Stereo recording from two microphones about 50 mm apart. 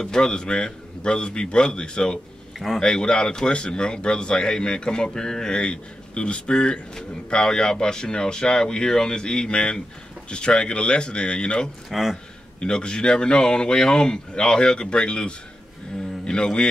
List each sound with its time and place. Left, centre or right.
0.0 s speech: centre
11.9 s speech: centre
12.5 s speech: centre